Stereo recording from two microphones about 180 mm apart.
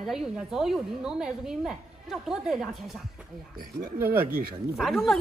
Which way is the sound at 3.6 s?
55° right (ahead or behind).